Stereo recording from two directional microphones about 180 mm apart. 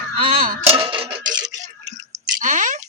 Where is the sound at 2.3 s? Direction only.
45° right (ahead or behind).